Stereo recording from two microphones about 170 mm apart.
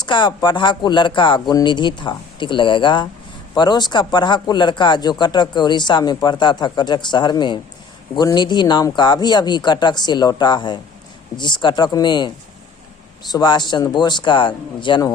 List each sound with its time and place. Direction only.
0.0 s speech: 25° left (ahead or behind)